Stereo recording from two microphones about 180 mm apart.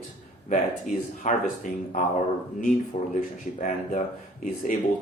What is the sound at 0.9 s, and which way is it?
Speech, 45° left (ahead or behind).